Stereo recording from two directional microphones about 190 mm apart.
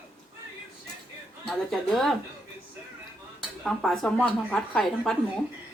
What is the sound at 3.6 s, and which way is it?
A woman's voice, centre (ahead or behind).